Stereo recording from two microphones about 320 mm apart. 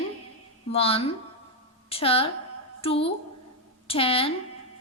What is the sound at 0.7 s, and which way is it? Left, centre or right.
A woman's voice, centre.